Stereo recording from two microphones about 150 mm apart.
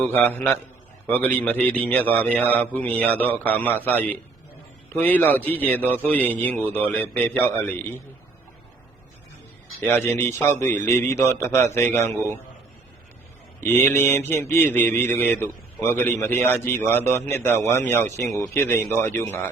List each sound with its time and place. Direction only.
0.2 s mantra: 10° left (ahead or behind)
9.8 s mantra: 15° left (ahead or behind)
13.6 s mantra: 15° left (ahead or behind)